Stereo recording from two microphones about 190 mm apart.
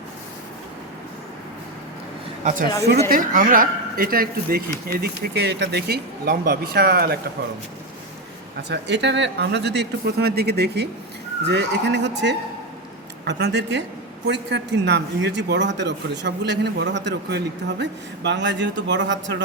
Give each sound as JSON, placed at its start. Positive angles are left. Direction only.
{"t": 2.4, "sound": "a man's voice", "side_deg": -45}
{"t": 8.7, "sound": "a man's voice", "side_deg": -65}